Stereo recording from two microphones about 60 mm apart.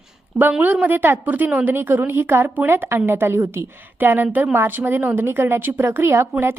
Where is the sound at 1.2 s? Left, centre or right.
Right.